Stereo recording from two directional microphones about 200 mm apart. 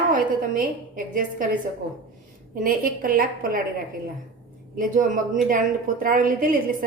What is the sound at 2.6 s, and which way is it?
A woman's voice, 45° right (ahead or behind).